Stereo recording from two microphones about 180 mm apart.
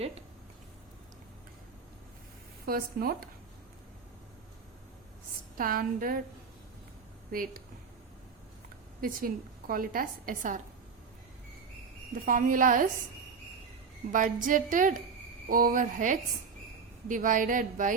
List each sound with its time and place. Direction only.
2.6 s speech: 55° right (ahead or behind)
5.5 s a woman's voice: 50° right (ahead or behind)
7.3 s speech: 50° right (ahead or behind)
9.0 s a woman's voice: 50° right (ahead or behind)
12.2 s a woman's voice: 50° right (ahead or behind)
14.1 s a woman's voice: 45° right (ahead or behind)